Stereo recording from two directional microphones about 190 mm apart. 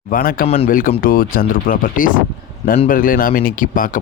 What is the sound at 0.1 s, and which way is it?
Speech, 50° left (ahead or behind).